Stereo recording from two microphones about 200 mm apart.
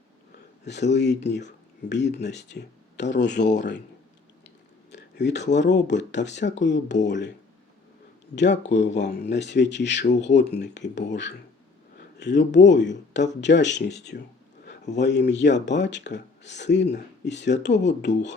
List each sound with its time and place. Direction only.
0.6 s speech: 60° left (ahead or behind)
4.9 s a sound: 60° left (ahead or behind)
5.5 s speech: 60° left (ahead or behind)
8.4 s speech: 60° left (ahead or behind)